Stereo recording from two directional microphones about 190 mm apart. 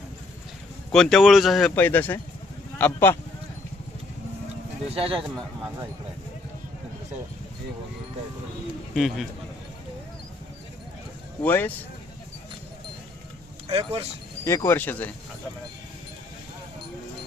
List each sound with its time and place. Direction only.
0.9 s speech: 5° left (ahead or behind)
4.9 s a man's voice: 30° right (ahead or behind)
9.0 s speech: centre (ahead or behind)
11.4 s speech: 10° left (ahead or behind)
13.7 s speech: 30° right (ahead or behind)
14.4 s speech: 15° left (ahead or behind)